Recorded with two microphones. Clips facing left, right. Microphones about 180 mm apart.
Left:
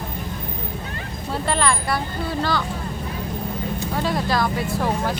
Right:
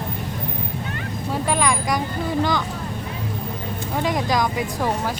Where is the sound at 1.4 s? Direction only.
10° right (ahead or behind).